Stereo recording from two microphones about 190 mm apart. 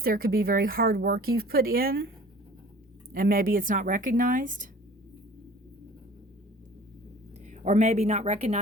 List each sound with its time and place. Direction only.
0.0 s speech: 50° right (ahead or behind)
3.1 s speech: 50° right (ahead or behind)
7.4 s a woman's voice: 40° right (ahead or behind)